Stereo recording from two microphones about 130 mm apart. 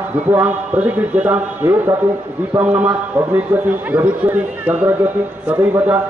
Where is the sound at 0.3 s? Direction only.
10° right (ahead or behind).